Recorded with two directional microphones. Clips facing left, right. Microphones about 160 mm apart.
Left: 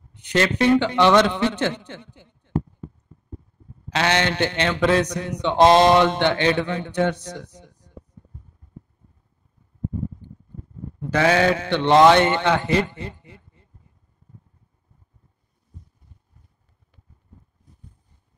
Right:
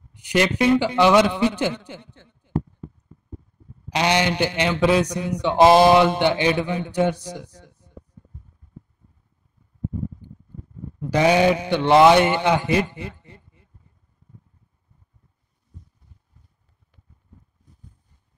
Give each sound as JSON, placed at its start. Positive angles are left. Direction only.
{"t": 0.1, "sound": "a man's voice", "side_deg": -10}
{"t": 2.2, "sound": "speech", "side_deg": 10}
{"t": 3.9, "sound": "a man's voice", "side_deg": -15}
{"t": 7.7, "sound": "a sound", "side_deg": -10}
{"t": 11.1, "sound": "a man's voice", "side_deg": -15}
{"t": 13.1, "sound": "speech", "side_deg": 15}